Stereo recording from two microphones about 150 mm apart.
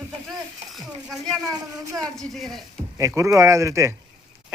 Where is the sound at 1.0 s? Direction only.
Centre (ahead or behind).